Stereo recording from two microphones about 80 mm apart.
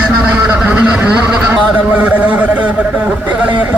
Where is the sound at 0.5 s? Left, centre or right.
Centre.